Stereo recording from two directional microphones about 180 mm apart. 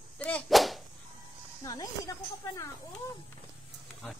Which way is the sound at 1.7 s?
20° left (ahead or behind).